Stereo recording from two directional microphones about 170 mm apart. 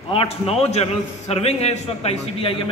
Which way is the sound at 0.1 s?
35° left (ahead or behind).